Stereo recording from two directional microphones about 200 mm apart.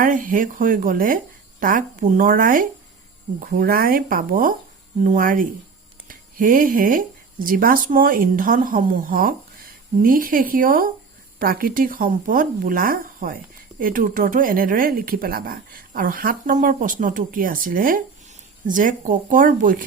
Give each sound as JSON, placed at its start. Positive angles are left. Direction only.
{"t": 0.0, "sound": "speech", "side_deg": -45}